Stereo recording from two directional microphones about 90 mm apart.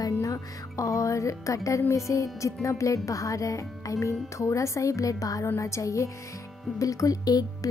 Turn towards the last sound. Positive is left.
turn(degrees=45)  # may be behind; listen again after turning